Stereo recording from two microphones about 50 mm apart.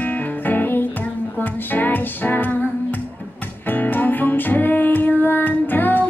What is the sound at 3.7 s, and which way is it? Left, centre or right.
Music, left.